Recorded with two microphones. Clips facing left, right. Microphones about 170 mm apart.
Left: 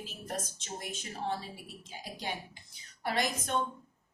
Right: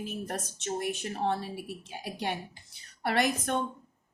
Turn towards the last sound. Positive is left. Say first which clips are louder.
# right 4 dB
turn(degrees=-60)  # may be behind; listen again after turning